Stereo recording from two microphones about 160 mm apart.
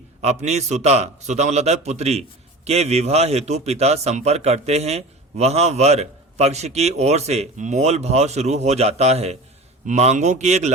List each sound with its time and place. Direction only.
0.2 s a man's voice: 45° right (ahead or behind)